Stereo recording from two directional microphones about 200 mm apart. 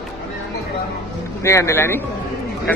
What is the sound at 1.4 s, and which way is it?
Speech, 15° left (ahead or behind).